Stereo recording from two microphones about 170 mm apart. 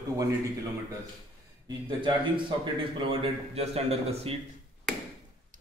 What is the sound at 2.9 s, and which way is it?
A man's voice, 35° right (ahead or behind).